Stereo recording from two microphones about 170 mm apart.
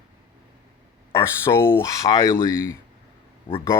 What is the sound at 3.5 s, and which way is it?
Speech, 30° left (ahead or behind).